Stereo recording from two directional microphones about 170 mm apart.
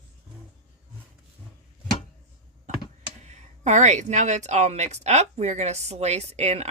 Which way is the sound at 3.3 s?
45° right (ahead or behind).